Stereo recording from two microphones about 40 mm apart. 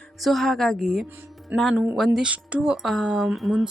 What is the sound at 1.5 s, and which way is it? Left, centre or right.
Speech, right.